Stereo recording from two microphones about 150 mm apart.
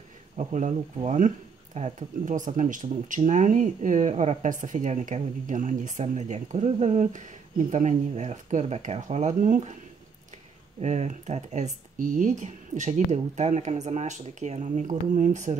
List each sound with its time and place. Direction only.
0.4 s speech: 55° right (ahead or behind)
10.8 s speech: 50° right (ahead or behind)